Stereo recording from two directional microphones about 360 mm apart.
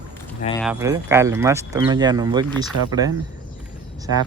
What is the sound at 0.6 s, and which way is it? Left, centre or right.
Speech, centre.